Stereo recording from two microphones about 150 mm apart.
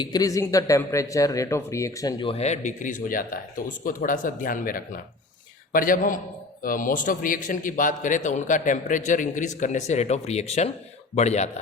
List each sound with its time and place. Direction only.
0.0 s speech: 25° left (ahead or behind)
2.3 s a man's voice: 50° left (ahead or behind)